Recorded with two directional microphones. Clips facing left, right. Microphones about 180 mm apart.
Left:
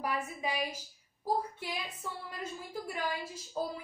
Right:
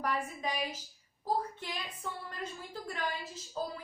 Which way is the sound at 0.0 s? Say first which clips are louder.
Even; 10° left (ahead or behind).